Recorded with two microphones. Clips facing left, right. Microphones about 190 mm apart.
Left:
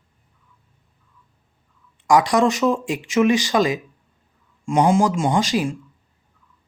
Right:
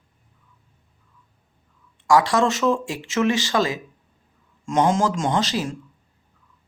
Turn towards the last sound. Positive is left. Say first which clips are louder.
# left 3 dB
turn(degrees=15)  # may be behind; listen again after turning